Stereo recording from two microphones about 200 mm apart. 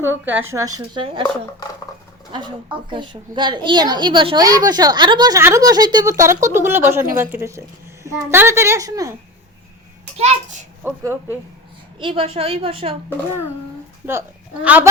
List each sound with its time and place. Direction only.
0.0 s a child's voice: 10° right (ahead or behind)
0.9 s a woman's voice: 25° right (ahead or behind)
2.9 s a woman's voice: 25° right (ahead or behind)
10.2 s a child's voice: 35° right (ahead or behind)
10.8 s a child's voice: 10° right (ahead or behind)
11.9 s a woman's voice: 25° right (ahead or behind)
14.1 s a woman's voice: 10° right (ahead or behind)